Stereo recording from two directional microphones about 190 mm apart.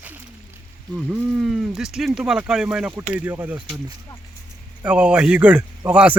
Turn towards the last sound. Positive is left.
turn(degrees=-10)  # may be behind; listen again after turning